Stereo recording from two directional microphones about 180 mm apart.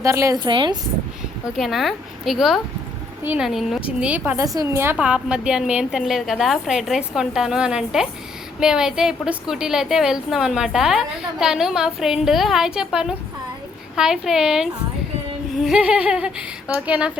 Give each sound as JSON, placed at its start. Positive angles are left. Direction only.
{"t": 0.0, "sound": "speech", "side_deg": -15}
{"t": 1.5, "sound": "a woman's voice", "side_deg": 0}